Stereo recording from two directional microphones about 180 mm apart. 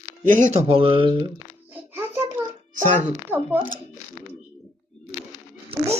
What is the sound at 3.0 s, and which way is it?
Speech, 10° right (ahead or behind).